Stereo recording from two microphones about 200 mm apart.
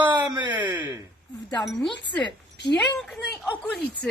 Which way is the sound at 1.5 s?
25° left (ahead or behind).